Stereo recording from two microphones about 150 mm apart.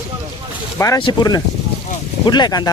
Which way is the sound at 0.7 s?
20° left (ahead or behind).